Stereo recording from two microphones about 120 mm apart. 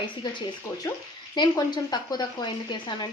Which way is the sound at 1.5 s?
30° left (ahead or behind).